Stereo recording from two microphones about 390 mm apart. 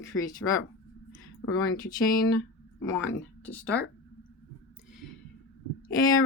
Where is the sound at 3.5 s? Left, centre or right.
Centre.